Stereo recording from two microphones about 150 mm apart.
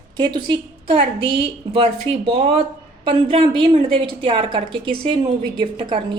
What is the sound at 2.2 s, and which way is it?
A woman's voice, 40° right (ahead or behind).